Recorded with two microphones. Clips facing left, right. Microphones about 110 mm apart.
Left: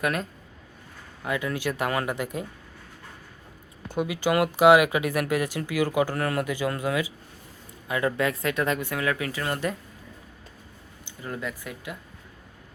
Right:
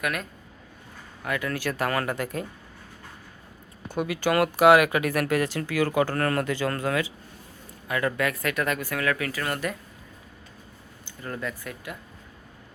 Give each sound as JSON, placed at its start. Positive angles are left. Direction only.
{"t": 0.0, "sound": "speech", "side_deg": 30}
{"t": 1.2, "sound": "speech", "side_deg": 20}
{"t": 3.9, "sound": "speech", "side_deg": 15}
{"t": 11.0, "sound": "speech", "side_deg": 15}